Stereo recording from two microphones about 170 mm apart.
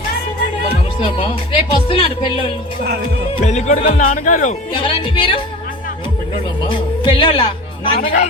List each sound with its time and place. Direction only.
0.9 s speech: 30° left (ahead or behind)
3.4 s speech: 45° left (ahead or behind)
4.7 s speech: 30° left (ahead or behind)
6.7 s speech: 30° left (ahead or behind)
7.9 s speech: 40° left (ahead or behind)